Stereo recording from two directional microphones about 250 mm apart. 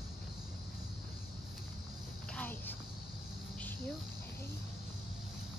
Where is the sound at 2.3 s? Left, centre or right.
Centre.